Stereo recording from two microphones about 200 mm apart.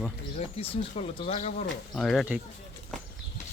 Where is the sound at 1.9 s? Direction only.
Centre (ahead or behind).